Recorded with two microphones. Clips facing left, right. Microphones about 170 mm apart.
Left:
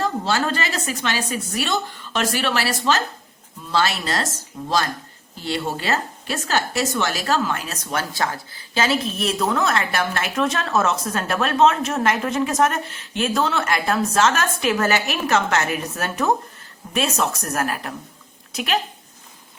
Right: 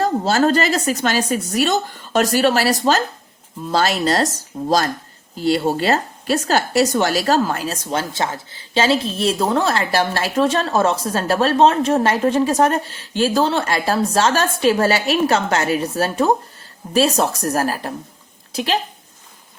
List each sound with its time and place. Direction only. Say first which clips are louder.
0.0 s a woman's voice: right 6 dB; 40° right (ahead or behind)